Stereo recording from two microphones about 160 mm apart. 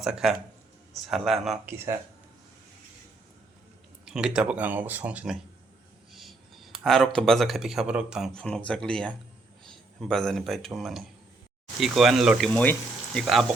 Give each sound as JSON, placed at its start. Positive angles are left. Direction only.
{"t": 0.0, "sound": "speech", "side_deg": -5}
{"t": 1.6, "sound": "speech", "side_deg": -15}
{"t": 4.0, "sound": "speech", "side_deg": -5}